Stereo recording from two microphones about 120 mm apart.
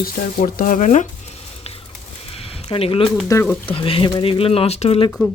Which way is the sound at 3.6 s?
50° left (ahead or behind).